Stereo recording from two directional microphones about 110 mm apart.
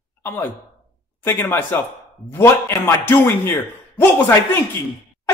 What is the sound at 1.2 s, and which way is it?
Speech, 20° left (ahead or behind).